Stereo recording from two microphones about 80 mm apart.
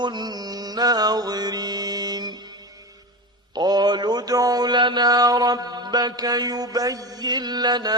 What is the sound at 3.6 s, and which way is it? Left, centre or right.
Mantra, right.